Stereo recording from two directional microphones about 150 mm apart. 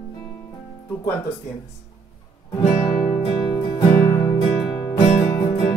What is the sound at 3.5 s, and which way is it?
Music, 30° left (ahead or behind).